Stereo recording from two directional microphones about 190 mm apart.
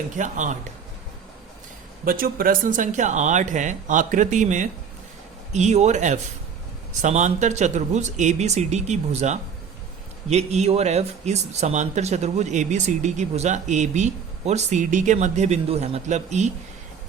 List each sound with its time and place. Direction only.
0.2 s speech: 40° right (ahead or behind)
2.0 s speech: 50° right (ahead or behind)